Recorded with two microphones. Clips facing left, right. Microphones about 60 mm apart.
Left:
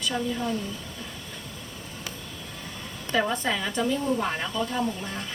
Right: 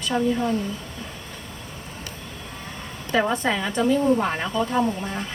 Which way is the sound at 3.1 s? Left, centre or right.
Centre.